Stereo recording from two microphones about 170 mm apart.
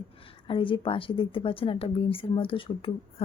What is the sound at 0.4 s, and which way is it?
Speech, 30° left (ahead or behind).